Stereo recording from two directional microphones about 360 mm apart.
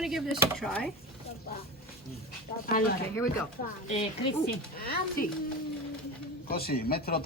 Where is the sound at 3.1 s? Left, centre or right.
Centre.